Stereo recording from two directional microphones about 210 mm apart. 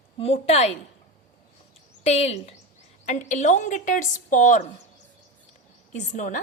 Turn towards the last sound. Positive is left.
turn(degrees=35)  # may be behind; listen again after turning